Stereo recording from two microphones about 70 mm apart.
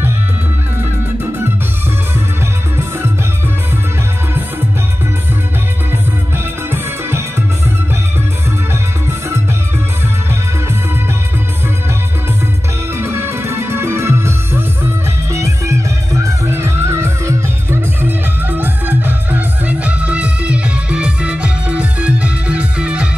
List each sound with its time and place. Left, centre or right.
6.3 s music: right
12.9 s music: right
18.0 s music: right